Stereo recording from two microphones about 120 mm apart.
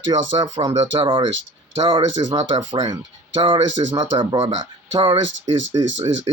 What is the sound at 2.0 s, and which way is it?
Speech, 30° right (ahead or behind).